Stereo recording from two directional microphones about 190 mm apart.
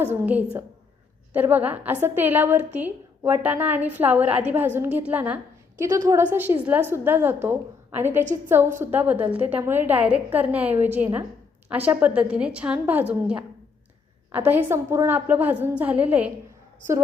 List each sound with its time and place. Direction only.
0.0 s a woman's voice: 10° right (ahead or behind)
5.8 s a woman's voice: 20° right (ahead or behind)